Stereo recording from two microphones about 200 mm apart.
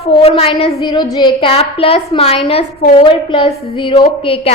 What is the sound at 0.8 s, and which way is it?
A woman's voice, 20° left (ahead or behind).